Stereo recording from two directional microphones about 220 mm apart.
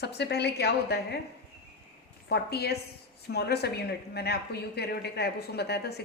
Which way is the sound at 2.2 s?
50° left (ahead or behind).